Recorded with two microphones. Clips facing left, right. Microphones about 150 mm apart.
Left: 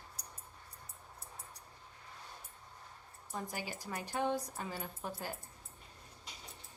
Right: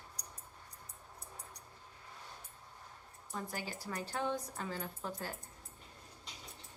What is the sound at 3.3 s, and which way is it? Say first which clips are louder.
A woman's voice: even; 15° left (ahead or behind).